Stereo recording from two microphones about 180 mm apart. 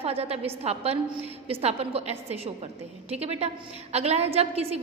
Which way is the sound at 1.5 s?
35° right (ahead or behind).